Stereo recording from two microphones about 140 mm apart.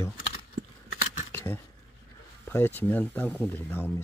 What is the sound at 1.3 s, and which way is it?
Cutlery, 15° left (ahead or behind).